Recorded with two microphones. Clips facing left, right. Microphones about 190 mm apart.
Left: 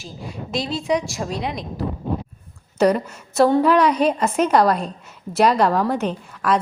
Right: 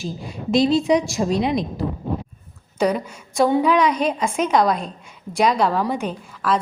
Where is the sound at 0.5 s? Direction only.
5° left (ahead or behind).